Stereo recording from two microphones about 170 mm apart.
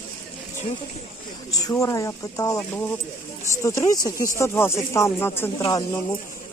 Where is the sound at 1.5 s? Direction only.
20° left (ahead or behind).